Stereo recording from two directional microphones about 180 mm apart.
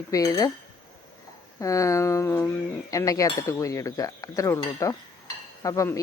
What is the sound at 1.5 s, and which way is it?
Speech, 15° left (ahead or behind).